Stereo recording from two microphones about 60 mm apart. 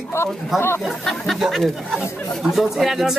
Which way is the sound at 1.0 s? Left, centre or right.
Centre.